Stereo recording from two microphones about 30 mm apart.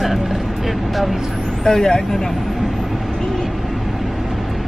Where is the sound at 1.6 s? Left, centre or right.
Centre.